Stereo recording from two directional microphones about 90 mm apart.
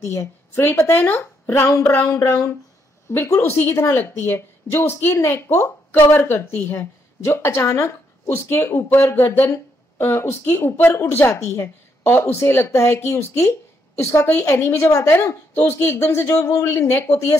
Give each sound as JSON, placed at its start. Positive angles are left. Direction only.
{"t": 0.0, "sound": "speech", "side_deg": 30}